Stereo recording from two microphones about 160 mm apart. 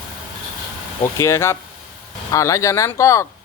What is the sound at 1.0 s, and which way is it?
A man's voice, 20° left (ahead or behind).